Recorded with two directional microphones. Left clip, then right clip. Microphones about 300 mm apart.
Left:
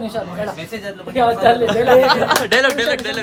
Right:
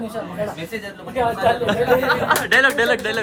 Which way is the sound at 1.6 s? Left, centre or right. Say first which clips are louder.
Left 5 dB; centre.